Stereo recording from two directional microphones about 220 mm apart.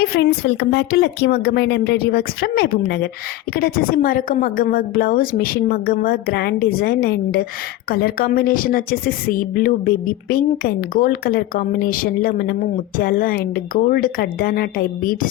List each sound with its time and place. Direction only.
0.1 s a woman's voice: 50° left (ahead or behind)